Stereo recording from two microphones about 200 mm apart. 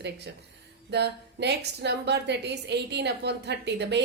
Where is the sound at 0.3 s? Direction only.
60° right (ahead or behind).